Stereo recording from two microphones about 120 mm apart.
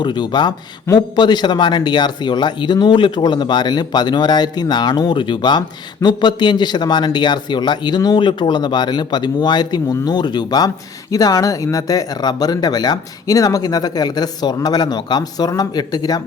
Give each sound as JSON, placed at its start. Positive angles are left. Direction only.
{"t": 0.0, "sound": "speech", "side_deg": 40}